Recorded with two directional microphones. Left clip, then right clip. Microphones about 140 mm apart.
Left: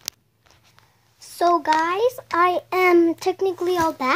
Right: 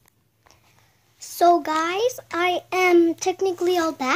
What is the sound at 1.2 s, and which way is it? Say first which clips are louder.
A child's voice: right 1 dB; 20° right (ahead or behind).